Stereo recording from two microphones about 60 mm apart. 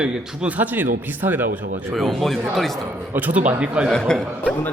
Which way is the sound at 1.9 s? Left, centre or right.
Centre.